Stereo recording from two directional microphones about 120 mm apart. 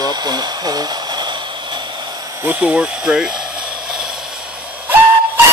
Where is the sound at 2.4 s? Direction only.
15° right (ahead or behind).